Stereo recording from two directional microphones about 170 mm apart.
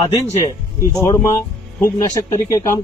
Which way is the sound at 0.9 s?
20° left (ahead or behind).